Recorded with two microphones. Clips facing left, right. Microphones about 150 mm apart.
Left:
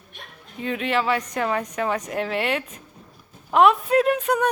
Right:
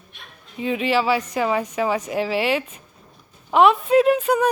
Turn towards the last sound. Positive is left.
turn(degrees=-5)  # may be behind; listen again after turning